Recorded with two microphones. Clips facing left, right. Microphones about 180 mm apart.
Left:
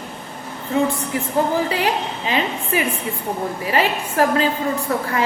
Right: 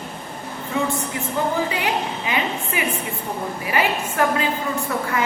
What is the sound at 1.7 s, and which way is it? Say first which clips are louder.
A woman's voice: left 2 dB; 30° left (ahead or behind).